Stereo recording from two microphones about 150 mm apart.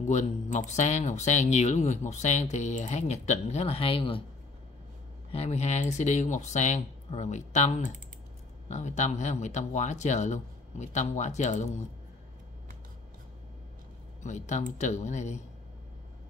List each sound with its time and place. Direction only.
0.1 s speech: 55° left (ahead or behind); by 4.2 s 35° left (ahead or behind)
5.3 s speech: 45° left (ahead or behind)
14.2 s speech: 50° left (ahead or behind)